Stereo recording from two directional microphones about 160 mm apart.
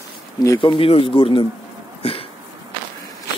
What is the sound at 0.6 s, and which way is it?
Speech, 35° left (ahead or behind).